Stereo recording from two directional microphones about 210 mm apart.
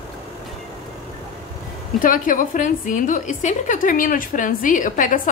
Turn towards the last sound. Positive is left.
turn(degrees=40)  # may be behind; listen again after turning